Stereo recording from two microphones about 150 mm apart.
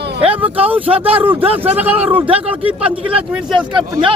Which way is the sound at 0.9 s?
40° right (ahead or behind).